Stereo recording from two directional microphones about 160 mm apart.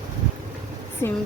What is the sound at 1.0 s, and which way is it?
Speech, 15° left (ahead or behind).